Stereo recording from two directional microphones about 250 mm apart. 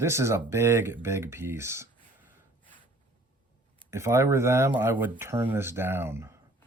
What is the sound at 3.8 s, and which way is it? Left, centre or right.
Speech, centre.